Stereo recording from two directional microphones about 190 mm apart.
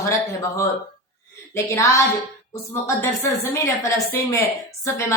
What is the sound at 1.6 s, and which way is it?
Speech, 15° left (ahead or behind).